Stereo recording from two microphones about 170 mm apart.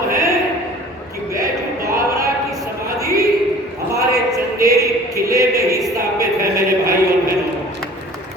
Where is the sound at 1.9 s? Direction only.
20° right (ahead or behind).